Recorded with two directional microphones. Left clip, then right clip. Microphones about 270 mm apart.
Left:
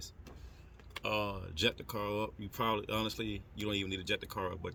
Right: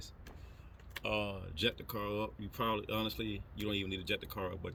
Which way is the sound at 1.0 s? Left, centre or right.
Left.